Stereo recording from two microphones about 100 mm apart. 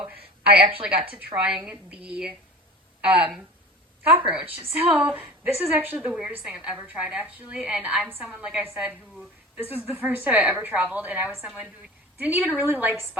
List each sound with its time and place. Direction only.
0.0 s a woman's voice: 15° right (ahead or behind)
0.6 s a woman's voice: 65° right (ahead or behind)
1.9 s a woman's voice: 10° right (ahead or behind)
11.3 s a woman's voice: 5° right (ahead or behind)